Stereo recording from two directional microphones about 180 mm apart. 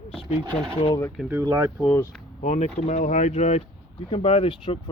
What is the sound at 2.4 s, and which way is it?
Speech, 40° left (ahead or behind).